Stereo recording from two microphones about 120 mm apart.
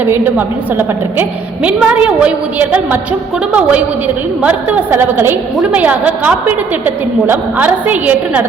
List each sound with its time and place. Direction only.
0.0 s a woman's voice: 15° right (ahead or behind)